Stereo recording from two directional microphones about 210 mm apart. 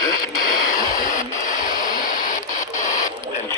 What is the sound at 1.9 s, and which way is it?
Radio, 40° left (ahead or behind).